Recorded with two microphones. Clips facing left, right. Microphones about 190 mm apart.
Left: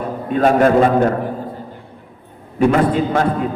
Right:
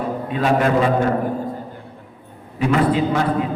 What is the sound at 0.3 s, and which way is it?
Speech, 50° left (ahead or behind).